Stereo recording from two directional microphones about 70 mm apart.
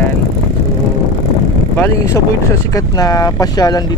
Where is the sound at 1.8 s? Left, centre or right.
Left.